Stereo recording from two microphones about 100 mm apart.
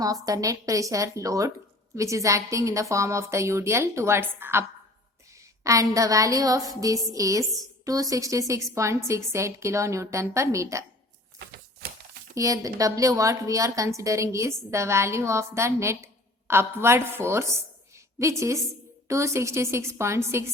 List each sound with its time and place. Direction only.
0.0 s a woman's voice: 35° right (ahead or behind)
5.6 s a woman's voice: 35° right (ahead or behind)
12.3 s a woman's voice: 35° right (ahead or behind)